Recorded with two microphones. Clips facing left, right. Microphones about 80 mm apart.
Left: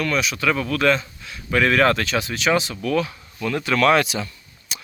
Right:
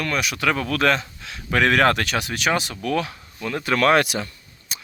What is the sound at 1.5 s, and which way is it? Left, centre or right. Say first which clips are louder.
Speech: even; right.